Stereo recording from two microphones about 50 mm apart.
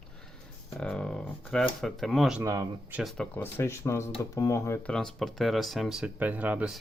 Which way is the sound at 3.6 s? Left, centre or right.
Left.